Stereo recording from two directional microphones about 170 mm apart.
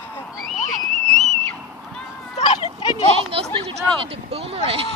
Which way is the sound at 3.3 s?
35° right (ahead or behind).